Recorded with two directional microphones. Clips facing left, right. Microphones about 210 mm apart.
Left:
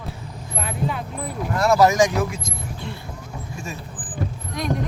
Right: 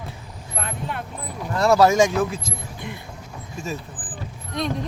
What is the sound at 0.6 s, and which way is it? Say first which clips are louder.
Vehicle: left 4 dB; 5° left (ahead or behind).